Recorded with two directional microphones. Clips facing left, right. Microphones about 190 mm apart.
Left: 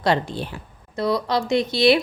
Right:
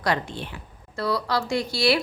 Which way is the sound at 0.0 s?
30° left (ahead or behind).